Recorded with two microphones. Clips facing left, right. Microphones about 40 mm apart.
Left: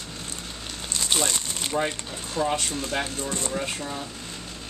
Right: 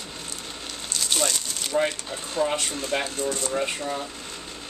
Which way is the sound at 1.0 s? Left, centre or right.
Centre.